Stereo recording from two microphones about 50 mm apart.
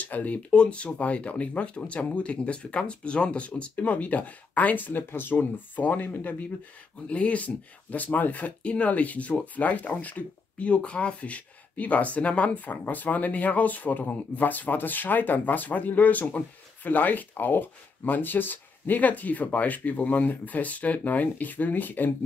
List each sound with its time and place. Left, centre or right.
0.0 s speech: left
7.1 s speech: left